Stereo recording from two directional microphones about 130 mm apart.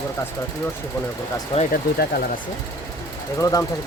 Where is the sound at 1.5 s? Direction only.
60° left (ahead or behind).